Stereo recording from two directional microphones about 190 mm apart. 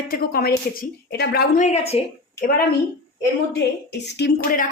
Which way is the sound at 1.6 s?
35° left (ahead or behind).